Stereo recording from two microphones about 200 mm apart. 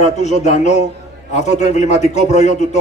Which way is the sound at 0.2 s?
35° left (ahead or behind).